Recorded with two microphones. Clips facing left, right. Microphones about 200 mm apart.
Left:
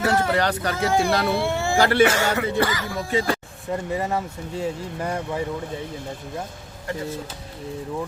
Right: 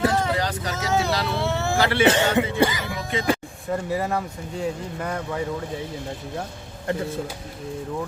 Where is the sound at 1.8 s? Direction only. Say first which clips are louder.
Left 5 dB; 45° left (ahead or behind).